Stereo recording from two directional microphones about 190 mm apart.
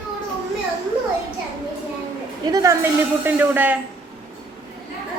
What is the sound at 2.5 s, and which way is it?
Speech, 15° right (ahead or behind).